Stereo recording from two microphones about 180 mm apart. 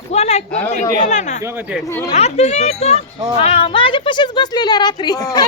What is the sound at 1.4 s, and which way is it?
Speech, 15° right (ahead or behind).